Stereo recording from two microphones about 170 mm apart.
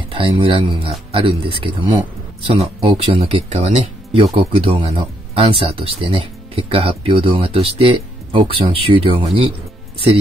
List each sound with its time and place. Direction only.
0.1 s speech: 30° right (ahead or behind)